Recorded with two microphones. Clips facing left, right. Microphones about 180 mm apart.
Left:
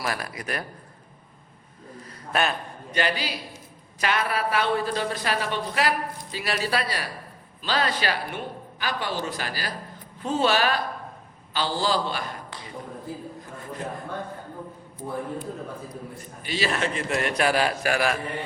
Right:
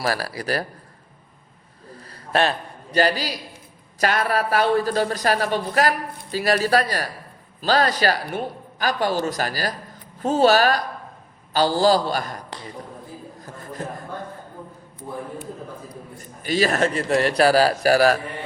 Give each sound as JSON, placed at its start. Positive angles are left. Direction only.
{"t": 0.0, "sound": "speech", "side_deg": -35}
{"t": 2.0, "sound": "a sound", "side_deg": -30}
{"t": 4.0, "sound": "speech", "side_deg": -40}
{"t": 16.4, "sound": "speech", "side_deg": -45}